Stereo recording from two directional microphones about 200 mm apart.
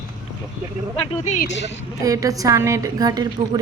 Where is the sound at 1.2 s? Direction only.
35° left (ahead or behind).